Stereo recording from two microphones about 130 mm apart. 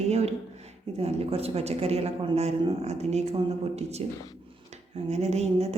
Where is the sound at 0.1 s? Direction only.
55° right (ahead or behind).